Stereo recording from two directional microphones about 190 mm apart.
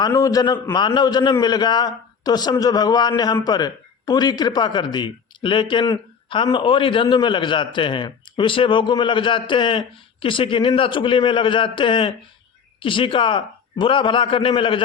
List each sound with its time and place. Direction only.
0.0 s a man's voice: 20° left (ahead or behind)